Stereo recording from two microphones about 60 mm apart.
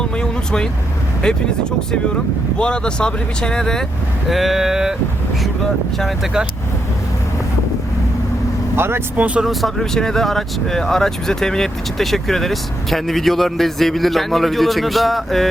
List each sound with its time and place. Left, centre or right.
0.0 s vehicle: centre
2.6 s speech: centre
4.3 s speech: centre
8.7 s speech: right
9.1 s speech: right
9.4 s speech: centre